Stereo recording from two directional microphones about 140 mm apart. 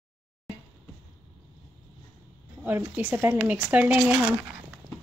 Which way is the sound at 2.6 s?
10° right (ahead or behind).